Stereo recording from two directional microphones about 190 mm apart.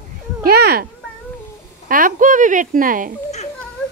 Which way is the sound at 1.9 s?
45° right (ahead or behind).